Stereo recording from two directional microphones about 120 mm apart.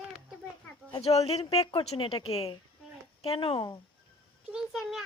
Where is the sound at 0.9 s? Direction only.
60° left (ahead or behind).